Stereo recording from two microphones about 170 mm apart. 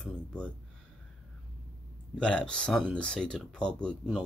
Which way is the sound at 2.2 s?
5° left (ahead or behind).